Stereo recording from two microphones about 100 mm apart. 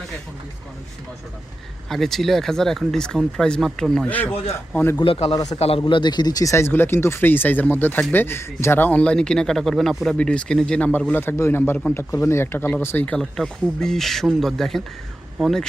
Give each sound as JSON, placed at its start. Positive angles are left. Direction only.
{"t": 1.9, "sound": "speech", "side_deg": 0}
{"t": 4.0, "sound": "speech", "side_deg": 15}
{"t": 4.9, "sound": "speech", "side_deg": 70}
{"t": 5.3, "sound": "a man's voice", "side_deg": 40}
{"t": 5.5, "sound": "a man's voice", "side_deg": 85}
{"t": 5.8, "sound": "speech", "side_deg": 45}
{"t": 6.5, "sound": "speech", "side_deg": 25}
{"t": 11.1, "sound": "speech", "side_deg": 20}
{"t": 13.1, "sound": "speech", "side_deg": 5}